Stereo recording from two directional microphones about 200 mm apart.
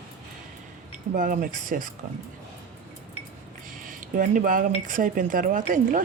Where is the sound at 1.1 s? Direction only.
40° right (ahead or behind).